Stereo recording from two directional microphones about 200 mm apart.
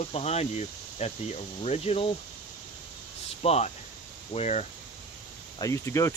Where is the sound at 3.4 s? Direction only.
30° left (ahead or behind).